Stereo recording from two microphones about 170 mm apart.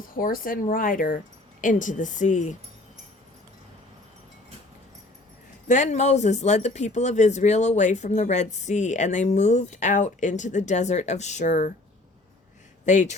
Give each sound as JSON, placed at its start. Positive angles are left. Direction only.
{"t": 0.1, "sound": "speech", "side_deg": 55}
{"t": 5.6, "sound": "speech", "side_deg": 45}
{"t": 12.8, "sound": "speech", "side_deg": 45}